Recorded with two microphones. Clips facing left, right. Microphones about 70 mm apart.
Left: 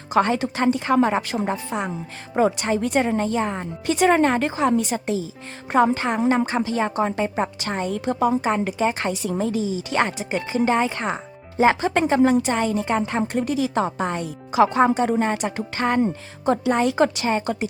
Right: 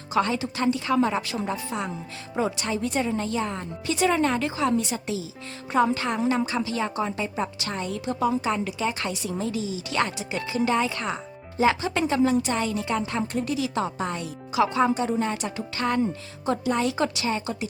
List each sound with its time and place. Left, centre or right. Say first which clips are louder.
0.1 s a woman's voice: left 5 dB; left
2.9 s a woman's voice: left 6 dB; left
3.2 s a woman's voice: left 5 dB; left